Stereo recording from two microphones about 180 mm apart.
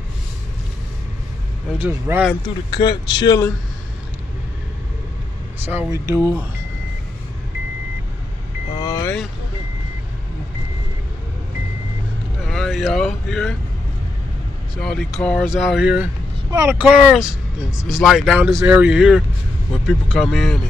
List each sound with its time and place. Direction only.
1.7 s speech: 10° right (ahead or behind)
2.7 s speech: 25° left (ahead or behind)
5.7 s speech: 15° right (ahead or behind)
8.8 s vehicle: 20° left (ahead or behind)
12.4 s vehicle: centre (ahead or behind)
14.8 s speech: 5° left (ahead or behind)